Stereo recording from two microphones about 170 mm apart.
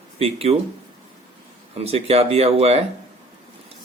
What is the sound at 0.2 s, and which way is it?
Speech, 35° right (ahead or behind).